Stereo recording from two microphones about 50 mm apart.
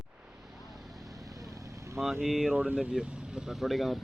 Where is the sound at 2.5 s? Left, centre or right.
Right.